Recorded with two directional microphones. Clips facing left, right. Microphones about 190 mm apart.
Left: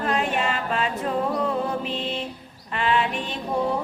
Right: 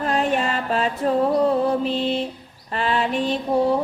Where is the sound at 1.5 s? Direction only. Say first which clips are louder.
Right 6 dB; 35° right (ahead or behind).